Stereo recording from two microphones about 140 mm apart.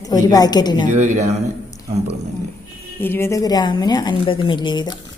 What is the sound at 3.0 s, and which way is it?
A woman's voice, 15° left (ahead or behind).